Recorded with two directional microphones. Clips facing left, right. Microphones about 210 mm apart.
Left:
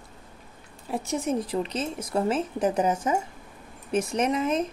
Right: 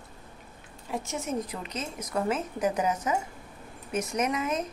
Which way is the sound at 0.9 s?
35° left (ahead or behind).